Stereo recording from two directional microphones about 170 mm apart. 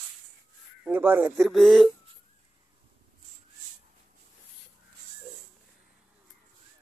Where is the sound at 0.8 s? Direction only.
10° right (ahead or behind).